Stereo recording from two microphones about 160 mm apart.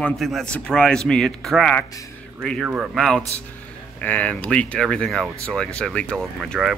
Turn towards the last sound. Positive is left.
turn(degrees=0)  # may be behind; listen again after turning